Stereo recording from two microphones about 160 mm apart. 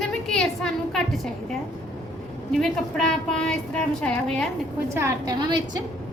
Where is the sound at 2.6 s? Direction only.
5° left (ahead or behind).